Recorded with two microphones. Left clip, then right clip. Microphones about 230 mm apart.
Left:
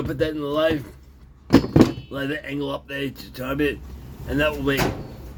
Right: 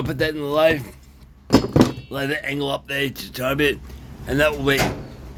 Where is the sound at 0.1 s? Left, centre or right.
Right.